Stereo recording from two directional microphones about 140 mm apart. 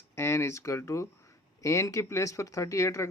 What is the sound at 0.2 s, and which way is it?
Speech, 20° left (ahead or behind).